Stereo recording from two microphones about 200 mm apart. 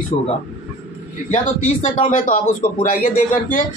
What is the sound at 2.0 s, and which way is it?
Speech, 40° left (ahead or behind).